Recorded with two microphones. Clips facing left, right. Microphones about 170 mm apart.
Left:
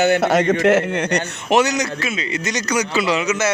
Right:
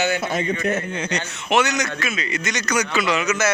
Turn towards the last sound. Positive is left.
turn(degrees=30)  # may be behind; listen again after turning